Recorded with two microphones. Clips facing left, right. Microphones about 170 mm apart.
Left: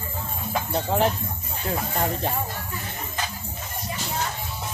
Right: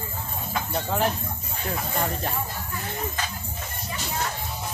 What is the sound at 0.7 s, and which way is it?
Speech, 25° left (ahead or behind).